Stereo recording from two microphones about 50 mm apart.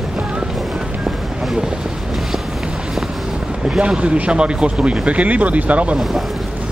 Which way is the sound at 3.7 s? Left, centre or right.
Right.